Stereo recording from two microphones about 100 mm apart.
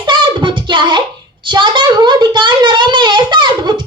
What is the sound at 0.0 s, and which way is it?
Child singing, 55° right (ahead or behind).